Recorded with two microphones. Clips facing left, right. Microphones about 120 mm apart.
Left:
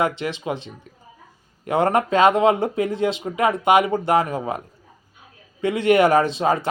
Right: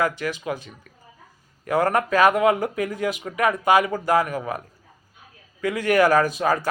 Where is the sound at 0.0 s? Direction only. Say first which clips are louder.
Left 1 dB; 25° left (ahead or behind).